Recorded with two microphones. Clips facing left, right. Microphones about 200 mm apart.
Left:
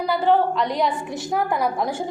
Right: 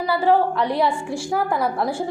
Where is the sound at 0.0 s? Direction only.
5° right (ahead or behind).